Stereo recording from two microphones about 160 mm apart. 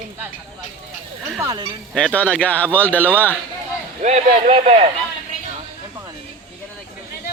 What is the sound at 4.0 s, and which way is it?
Speech, 45° right (ahead or behind).